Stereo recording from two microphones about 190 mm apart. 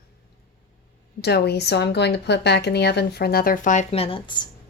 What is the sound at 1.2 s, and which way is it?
A woman's voice, 60° left (ahead or behind).